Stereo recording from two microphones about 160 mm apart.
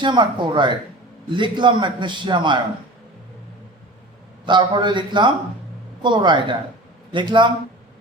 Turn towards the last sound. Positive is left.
turn(degrees=-30)  # may be behind; listen again after turning